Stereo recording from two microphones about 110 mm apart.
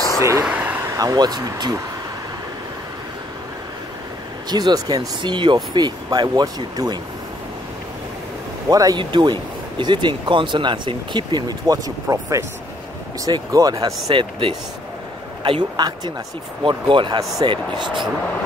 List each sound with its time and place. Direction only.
0.2 s a sound: 25° right (ahead or behind)
0.5 s a sound: 15° right (ahead or behind)
0.8 s speech: 30° right (ahead or behind)
4.5 s speech: 40° right (ahead or behind)
8.6 s speech: 35° right (ahead or behind)
14.0 s speech: 60° right (ahead or behind)
15.4 s speech: 45° right (ahead or behind)